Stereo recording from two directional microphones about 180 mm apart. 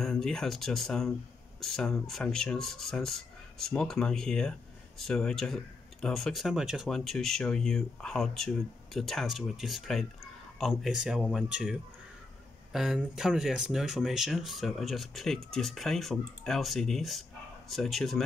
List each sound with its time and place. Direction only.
0.0 s speech: 5° left (ahead or behind)